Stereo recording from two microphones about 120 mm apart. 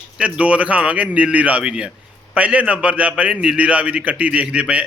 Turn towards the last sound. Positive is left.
turn(degrees=-10)  # may be behind; listen again after turning